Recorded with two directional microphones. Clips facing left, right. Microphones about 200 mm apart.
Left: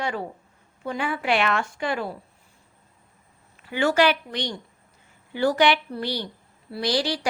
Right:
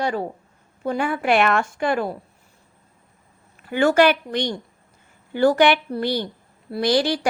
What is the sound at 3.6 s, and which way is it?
A woman's voice, 50° right (ahead or behind).